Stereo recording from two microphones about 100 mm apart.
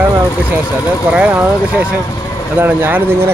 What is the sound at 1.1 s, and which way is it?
Speech, 15° right (ahead or behind).